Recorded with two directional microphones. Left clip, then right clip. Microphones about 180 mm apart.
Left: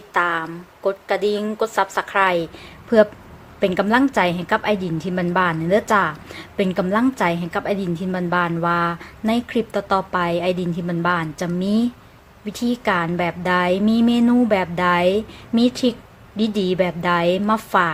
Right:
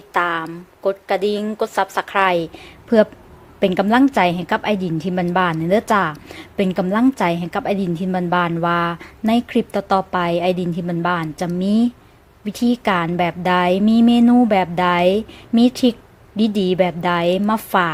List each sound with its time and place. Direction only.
0.1 s a woman's voice: 25° right (ahead or behind)
3.6 s a woman's voice: 25° right (ahead or behind)